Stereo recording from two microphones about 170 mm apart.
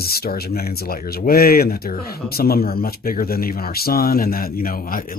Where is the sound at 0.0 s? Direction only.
65° left (ahead or behind).